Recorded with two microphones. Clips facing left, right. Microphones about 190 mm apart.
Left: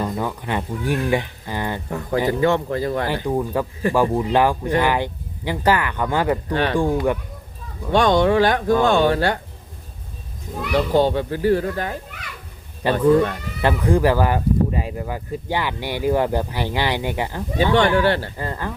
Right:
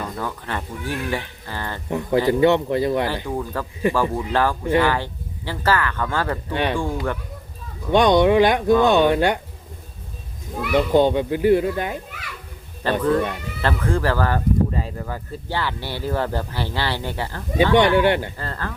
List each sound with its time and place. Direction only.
0.0 s speech: 15° left (ahead or behind)
1.9 s speech: 20° right (ahead or behind)
3.2 s speech: 15° left (ahead or behind)
6.5 s speech: 15° right (ahead or behind)
6.7 s speech: 15° left (ahead or behind)
7.9 s speech: 15° right (ahead or behind)
10.6 s speech: 5° right (ahead or behind)
10.9 s speech: 20° right (ahead or behind)
12.8 s speech: 15° left (ahead or behind)
17.7 s speech: 15° right (ahead or behind)
18.3 s speech: 15° left (ahead or behind)